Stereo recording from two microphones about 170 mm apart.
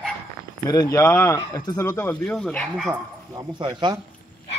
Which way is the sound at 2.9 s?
20° right (ahead or behind).